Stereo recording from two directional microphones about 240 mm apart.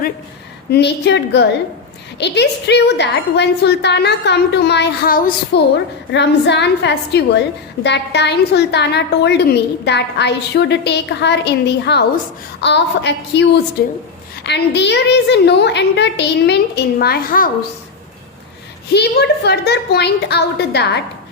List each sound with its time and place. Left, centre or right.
0.7 s a woman's voice: left
18.9 s a woman's voice: left